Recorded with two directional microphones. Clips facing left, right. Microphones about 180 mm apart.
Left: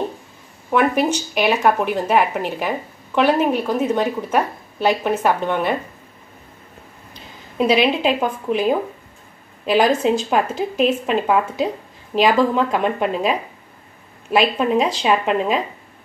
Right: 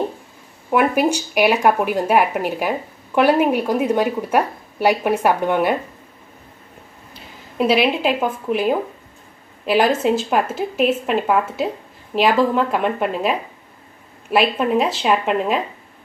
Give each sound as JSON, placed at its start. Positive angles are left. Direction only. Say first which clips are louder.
{"t": 0.7, "sound": "a woman's voice", "louder": "right 1 dB", "side_deg": -10}
{"t": 7.2, "sound": "a woman's voice", "louder": "even", "side_deg": -5}